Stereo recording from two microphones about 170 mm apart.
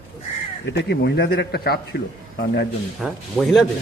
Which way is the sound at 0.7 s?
75° left (ahead or behind).